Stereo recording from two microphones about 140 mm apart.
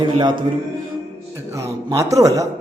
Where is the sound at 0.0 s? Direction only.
35° right (ahead or behind).